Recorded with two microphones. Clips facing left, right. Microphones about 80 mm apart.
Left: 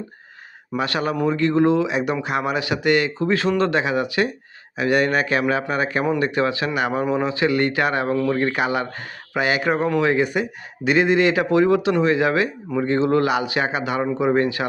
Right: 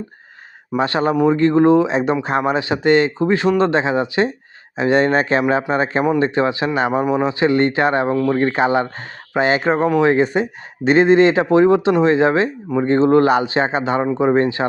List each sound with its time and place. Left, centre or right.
0.8 s speech: right